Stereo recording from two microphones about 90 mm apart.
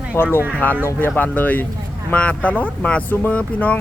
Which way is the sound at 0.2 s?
25° left (ahead or behind).